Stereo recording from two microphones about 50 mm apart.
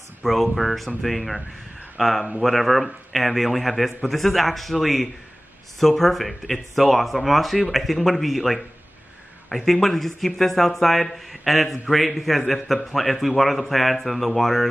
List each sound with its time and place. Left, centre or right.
0.2 s speech: centre